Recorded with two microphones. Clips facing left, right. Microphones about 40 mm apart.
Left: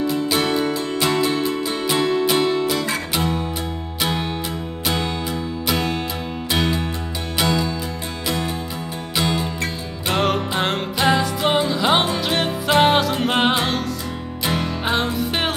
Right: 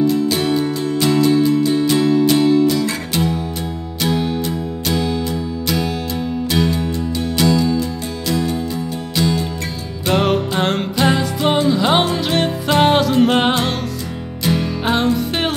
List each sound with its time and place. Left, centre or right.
0.0 s music: centre
7.4 s music: left
9.1 s music: left
10.0 s music: centre
14.9 s music: centre